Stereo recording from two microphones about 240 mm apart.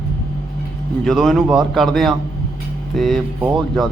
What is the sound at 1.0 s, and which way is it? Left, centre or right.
Speech, centre.